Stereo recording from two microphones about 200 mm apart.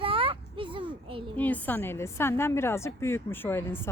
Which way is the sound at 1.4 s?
10° left (ahead or behind).